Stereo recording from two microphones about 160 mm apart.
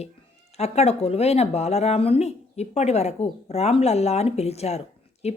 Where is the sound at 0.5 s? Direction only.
40° left (ahead or behind).